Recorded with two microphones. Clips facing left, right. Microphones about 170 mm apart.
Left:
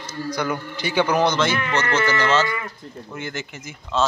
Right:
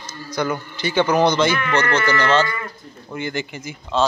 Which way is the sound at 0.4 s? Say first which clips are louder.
Right 5 dB; 10° left (ahead or behind).